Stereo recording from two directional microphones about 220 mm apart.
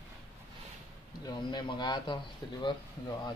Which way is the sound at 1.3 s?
20° left (ahead or behind).